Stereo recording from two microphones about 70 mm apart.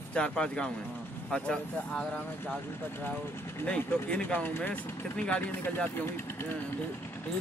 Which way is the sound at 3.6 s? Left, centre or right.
Centre.